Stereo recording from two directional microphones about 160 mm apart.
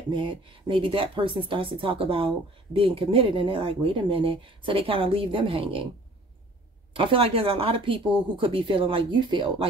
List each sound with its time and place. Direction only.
0.1 s a woman's voice: 30° right (ahead or behind)
6.9 s a woman's voice: 35° right (ahead or behind)